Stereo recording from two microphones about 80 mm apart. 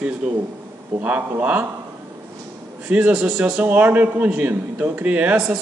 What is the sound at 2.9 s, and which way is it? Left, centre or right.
A man's voice, centre.